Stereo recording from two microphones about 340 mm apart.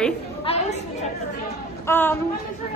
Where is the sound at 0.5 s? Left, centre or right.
Centre.